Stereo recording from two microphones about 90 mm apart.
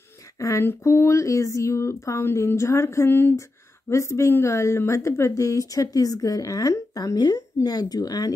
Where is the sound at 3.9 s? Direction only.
35° left (ahead or behind).